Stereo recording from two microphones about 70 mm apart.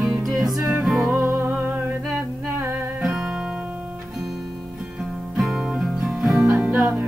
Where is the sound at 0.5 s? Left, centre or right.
Right.